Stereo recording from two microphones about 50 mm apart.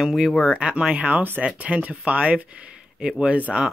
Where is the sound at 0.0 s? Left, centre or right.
Centre.